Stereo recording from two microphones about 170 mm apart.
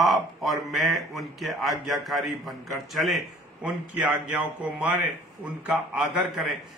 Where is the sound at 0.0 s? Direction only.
Centre (ahead or behind).